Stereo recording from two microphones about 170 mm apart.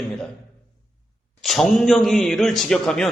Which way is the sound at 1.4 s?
Centre (ahead or behind).